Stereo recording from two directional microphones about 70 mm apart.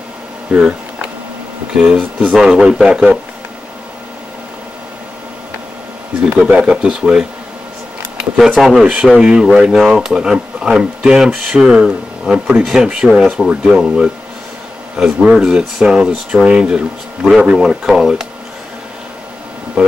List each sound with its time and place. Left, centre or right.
0.5 s speech: centre
6.4 s speech: centre
8.5 s speech: centre
8.8 s speech: centre